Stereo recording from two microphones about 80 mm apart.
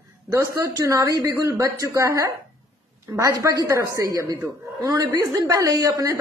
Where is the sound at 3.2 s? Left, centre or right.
Right.